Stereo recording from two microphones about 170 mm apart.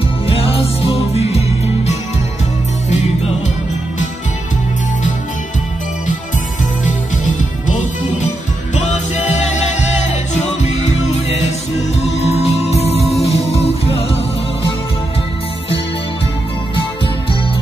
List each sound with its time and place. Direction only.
0.3 s music: 35° left (ahead or behind)
7.6 s music: 45° left (ahead or behind)